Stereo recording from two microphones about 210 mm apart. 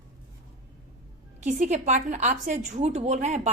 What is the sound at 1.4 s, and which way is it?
A woman's voice, 35° right (ahead or behind).